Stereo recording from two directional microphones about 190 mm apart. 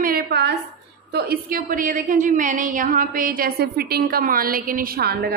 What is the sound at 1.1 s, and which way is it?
A woman's voice, 50° right (ahead or behind).